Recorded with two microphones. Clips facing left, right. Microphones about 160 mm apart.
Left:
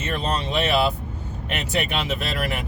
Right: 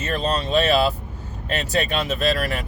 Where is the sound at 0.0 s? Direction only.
20° left (ahead or behind).